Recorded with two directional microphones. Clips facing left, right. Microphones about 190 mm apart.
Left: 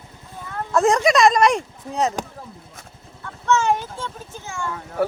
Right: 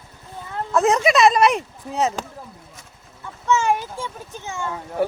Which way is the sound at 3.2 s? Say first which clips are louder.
Even; 10° right (ahead or behind).